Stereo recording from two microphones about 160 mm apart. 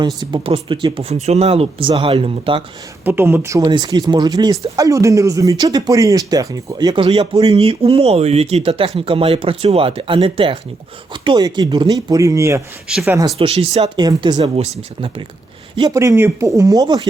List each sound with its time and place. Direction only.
0.0 s speech: 25° right (ahead or behind)
1.0 s speech: 40° right (ahead or behind)
3.0 s speech: 15° right (ahead or behind)
13.4 s speech: 40° right (ahead or behind)
13.9 s speech: 25° right (ahead or behind)
15.7 s speech: 25° right (ahead or behind)